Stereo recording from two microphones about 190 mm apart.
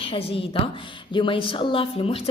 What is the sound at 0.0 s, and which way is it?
Speech, 30° left (ahead or behind).